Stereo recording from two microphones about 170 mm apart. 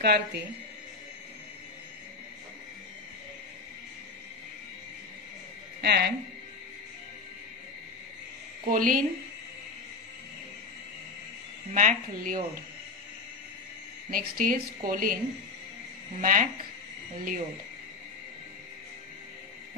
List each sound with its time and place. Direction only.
0.0 s speech: 70° right (ahead or behind)
5.8 s a woman's voice: 75° right (ahead or behind)
8.6 s a woman's voice: 55° right (ahead or behind)
11.7 s a woman's voice: 50° right (ahead or behind)
14.1 s a woman's voice: 55° right (ahead or behind)
16.2 s a woman's voice: 55° right (ahead or behind)